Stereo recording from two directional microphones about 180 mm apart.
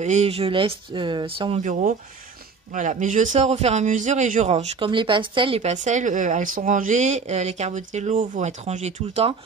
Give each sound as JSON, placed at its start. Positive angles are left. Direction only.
{"t": 0.0, "sound": "speech", "side_deg": -40}
{"t": 1.6, "sound": "speech", "side_deg": -45}